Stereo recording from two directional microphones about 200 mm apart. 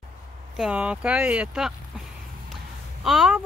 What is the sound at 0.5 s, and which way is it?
Speech, 5° right (ahead or behind).